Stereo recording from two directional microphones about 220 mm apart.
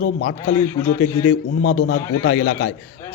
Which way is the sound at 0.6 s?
10° left (ahead or behind).